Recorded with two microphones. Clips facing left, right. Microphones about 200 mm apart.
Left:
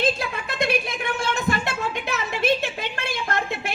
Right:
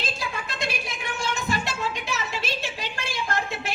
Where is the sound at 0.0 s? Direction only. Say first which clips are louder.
Left 8 dB; 55° left (ahead or behind).